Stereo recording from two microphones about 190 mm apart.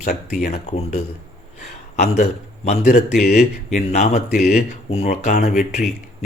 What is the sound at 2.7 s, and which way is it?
Speech, 55° left (ahead or behind).